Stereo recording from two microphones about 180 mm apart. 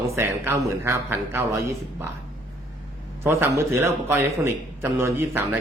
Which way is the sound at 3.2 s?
15° right (ahead or behind).